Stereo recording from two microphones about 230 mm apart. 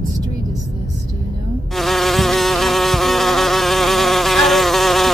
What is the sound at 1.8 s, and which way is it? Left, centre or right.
Insect, centre.